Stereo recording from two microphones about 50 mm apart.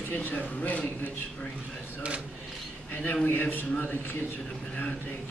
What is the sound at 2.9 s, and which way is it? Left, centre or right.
A man's voice, left.